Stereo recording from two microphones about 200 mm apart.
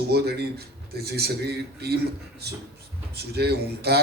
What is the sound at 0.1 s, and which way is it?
A man's voice, 55° right (ahead or behind).